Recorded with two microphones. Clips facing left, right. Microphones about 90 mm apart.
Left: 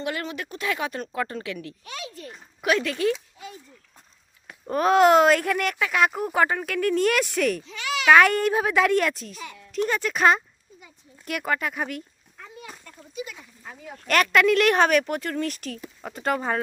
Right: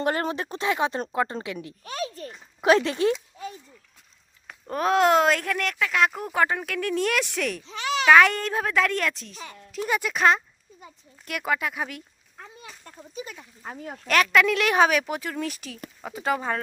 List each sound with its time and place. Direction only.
0.0 s speech: 40° right (ahead or behind); by 1.7 s 25° right (ahead or behind)
1.8 s speech: 40° right (ahead or behind)
4.7 s speech: centre (ahead or behind)
7.6 s a child's voice: 35° right (ahead or behind)
8.0 s speech: centre (ahead or behind)
12.8 s a sound: 35° right (ahead or behind)
13.6 s speech: 45° right (ahead or behind)
14.1 s speech: centre (ahead or behind)